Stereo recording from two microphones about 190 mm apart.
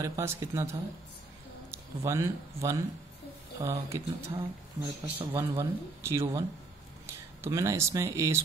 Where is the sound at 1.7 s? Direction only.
15° right (ahead or behind).